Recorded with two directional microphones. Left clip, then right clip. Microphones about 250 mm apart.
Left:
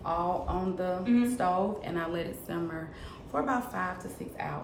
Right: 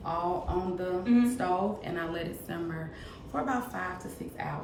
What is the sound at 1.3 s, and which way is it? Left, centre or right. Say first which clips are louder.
A woman's voice: left 1 dB; centre.